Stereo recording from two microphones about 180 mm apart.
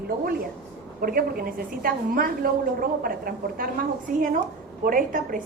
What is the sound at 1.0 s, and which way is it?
A woman's voice, 55° right (ahead or behind).